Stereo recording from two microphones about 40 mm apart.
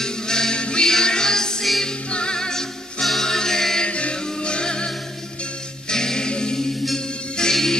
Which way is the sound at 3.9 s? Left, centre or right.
Left.